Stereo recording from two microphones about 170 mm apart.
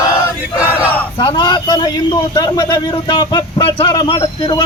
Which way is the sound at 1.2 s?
25° left (ahead or behind).